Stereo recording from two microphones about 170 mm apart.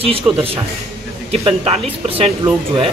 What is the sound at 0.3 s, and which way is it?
Speech, 10° right (ahead or behind).